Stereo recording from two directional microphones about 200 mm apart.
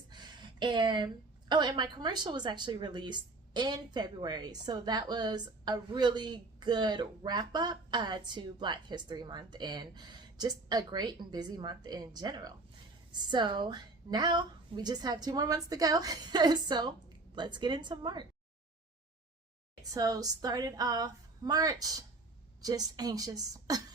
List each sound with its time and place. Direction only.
0.1 s a woman's voice: 20° right (ahead or behind)
19.8 s a woman's voice: 20° right (ahead or behind)